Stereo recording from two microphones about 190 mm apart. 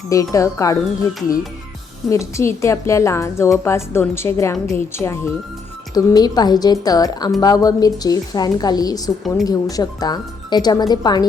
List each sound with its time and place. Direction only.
0.1 s a woman's voice: 15° left (ahead or behind)
2.0 s a woman's voice: 15° left (ahead or behind)
4.5 s a woman's voice: centre (ahead or behind)
4.9 s a woman's voice: 15° left (ahead or behind)